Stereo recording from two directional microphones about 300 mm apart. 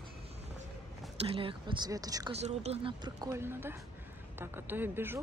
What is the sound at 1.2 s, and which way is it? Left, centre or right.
Speech, centre.